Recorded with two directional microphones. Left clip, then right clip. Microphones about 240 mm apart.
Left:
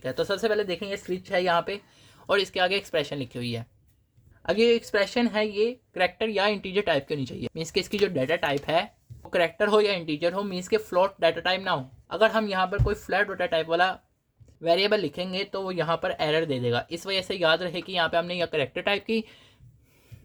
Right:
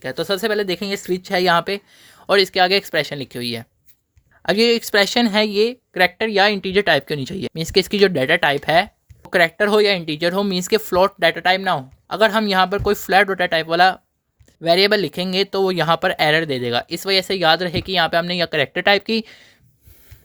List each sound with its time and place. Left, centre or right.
0.0 s speech: right